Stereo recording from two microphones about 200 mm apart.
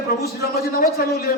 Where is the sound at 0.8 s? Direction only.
45° left (ahead or behind).